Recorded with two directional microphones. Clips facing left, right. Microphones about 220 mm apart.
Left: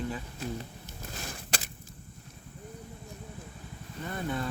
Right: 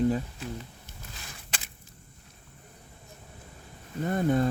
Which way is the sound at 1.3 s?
45° left (ahead or behind).